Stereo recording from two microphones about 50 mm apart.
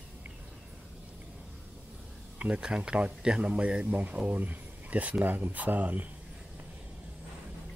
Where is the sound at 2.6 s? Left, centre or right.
Centre; by 6.0 s right.